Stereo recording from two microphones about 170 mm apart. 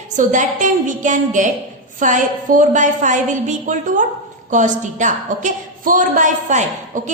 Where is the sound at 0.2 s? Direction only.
50° right (ahead or behind).